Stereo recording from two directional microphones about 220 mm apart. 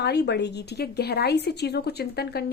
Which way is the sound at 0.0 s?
50° left (ahead or behind).